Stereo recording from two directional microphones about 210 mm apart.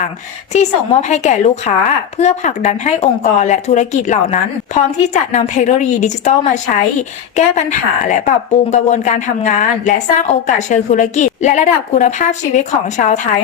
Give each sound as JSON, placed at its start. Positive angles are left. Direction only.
{"t": 0.5, "sound": "a woman's voice", "side_deg": 35}